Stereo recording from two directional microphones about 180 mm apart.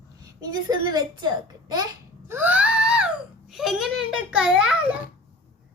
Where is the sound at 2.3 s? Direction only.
10° right (ahead or behind).